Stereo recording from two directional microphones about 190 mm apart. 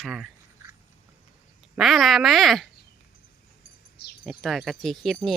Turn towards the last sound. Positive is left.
turn(degrees=0)  # may be behind; listen again after turning